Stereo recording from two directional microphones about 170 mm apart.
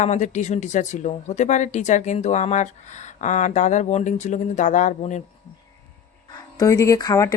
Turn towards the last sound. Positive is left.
turn(degrees=20)  # may be behind; listen again after turning